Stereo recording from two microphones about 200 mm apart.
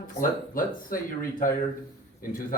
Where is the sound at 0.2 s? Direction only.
45° left (ahead or behind).